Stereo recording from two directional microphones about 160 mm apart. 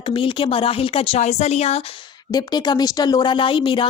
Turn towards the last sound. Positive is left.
turn(degrees=30)  # may be behind; listen again after turning